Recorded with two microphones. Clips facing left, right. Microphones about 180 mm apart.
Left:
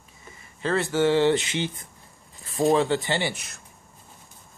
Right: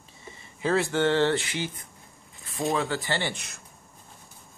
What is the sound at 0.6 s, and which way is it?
Speech, 5° right (ahead or behind).